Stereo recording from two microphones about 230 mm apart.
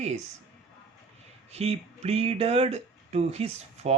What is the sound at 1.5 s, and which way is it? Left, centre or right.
Speech, right.